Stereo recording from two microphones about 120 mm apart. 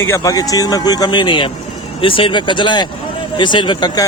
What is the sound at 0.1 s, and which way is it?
A man's voice, 30° left (ahead or behind).